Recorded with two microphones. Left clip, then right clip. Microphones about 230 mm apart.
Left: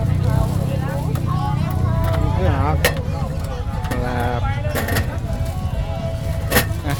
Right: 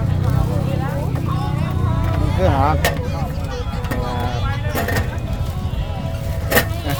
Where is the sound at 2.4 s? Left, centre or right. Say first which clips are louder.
Right 7 dB; right.